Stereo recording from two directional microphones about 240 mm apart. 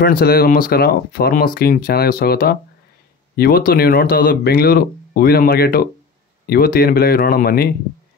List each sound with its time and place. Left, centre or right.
0.0 s speech: left